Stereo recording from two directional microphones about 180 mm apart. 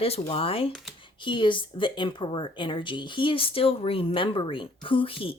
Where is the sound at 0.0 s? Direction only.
30° left (ahead or behind).